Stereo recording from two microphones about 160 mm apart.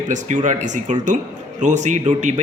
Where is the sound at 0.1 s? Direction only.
50° right (ahead or behind).